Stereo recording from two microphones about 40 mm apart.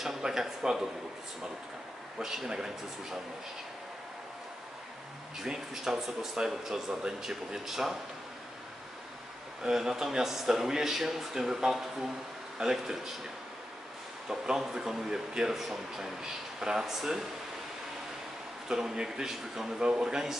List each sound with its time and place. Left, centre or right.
0.2 s speech: centre
2.1 s speech: centre
5.5 s speech: centre
9.6 s speech: centre
14.3 s speech: centre
18.7 s speech: centre
19.8 s speech: centre